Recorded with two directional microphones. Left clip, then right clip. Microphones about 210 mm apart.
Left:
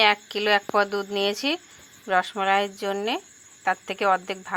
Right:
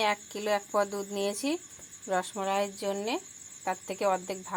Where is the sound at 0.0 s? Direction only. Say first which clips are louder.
Left 9 dB; 5° left (ahead or behind).